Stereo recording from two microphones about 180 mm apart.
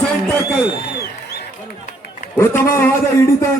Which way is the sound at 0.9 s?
60° left (ahead or behind).